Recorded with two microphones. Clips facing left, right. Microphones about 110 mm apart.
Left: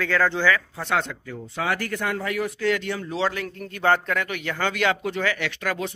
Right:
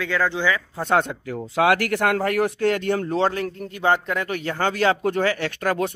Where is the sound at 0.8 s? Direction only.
45° right (ahead or behind).